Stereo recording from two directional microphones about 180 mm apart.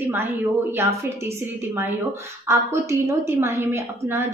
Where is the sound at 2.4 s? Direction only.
15° right (ahead or behind).